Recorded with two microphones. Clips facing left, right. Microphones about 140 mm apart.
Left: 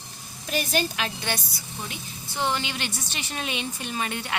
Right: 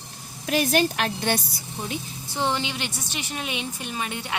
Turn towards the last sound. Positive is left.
turn(degrees=-15)  # may be behind; listen again after turning